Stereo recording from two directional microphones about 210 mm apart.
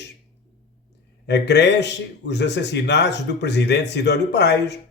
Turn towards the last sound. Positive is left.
turn(degrees=55)  # may be behind; listen again after turning